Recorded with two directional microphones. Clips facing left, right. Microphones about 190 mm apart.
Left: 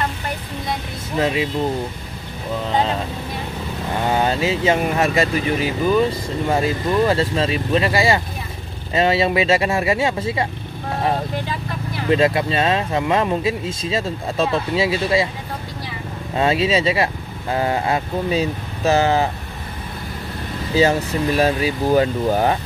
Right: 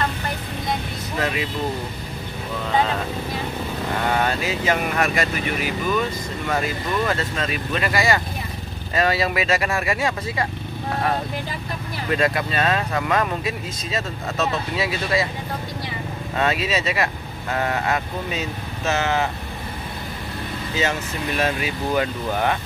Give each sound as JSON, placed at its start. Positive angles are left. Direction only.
{"t": 1.1, "sound": "speech", "side_deg": 25}
{"t": 4.1, "sound": "speech", "side_deg": 25}
{"t": 12.1, "sound": "speech", "side_deg": 25}
{"t": 16.3, "sound": "speech", "side_deg": 30}
{"t": 20.7, "sound": "speech", "side_deg": 35}